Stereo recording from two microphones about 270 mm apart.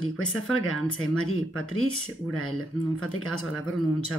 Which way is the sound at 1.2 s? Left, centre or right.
Left.